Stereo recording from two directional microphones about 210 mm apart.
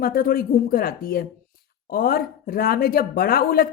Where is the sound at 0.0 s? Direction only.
45° left (ahead or behind).